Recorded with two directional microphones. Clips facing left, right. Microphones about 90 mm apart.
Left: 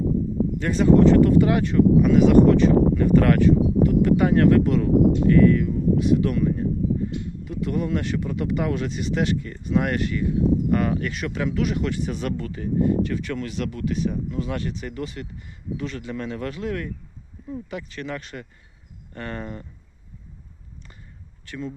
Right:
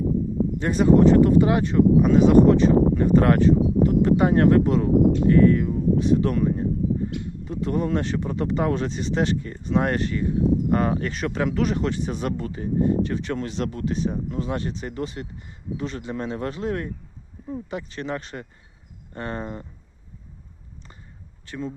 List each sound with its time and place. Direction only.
0.6 s speech: 20° right (ahead or behind)
21.4 s speech: 25° right (ahead or behind)